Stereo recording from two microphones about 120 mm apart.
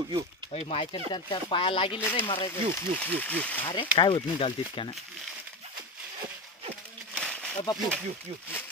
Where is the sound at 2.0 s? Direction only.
20° left (ahead or behind).